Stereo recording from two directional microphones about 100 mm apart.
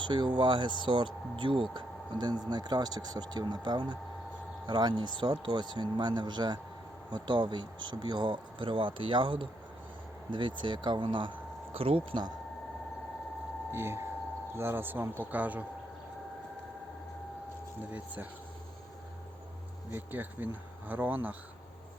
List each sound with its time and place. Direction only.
0.0 s speech: 55° right (ahead or behind)
11.8 s speech: 70° right (ahead or behind)
13.7 s speech: 25° right (ahead or behind)
17.9 s speech: 15° right (ahead or behind)
19.9 s speech: 20° right (ahead or behind)